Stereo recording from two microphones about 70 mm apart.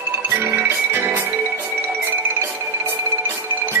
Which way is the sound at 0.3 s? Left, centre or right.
Right.